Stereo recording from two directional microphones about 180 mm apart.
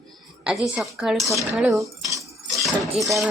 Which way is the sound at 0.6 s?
5° right (ahead or behind).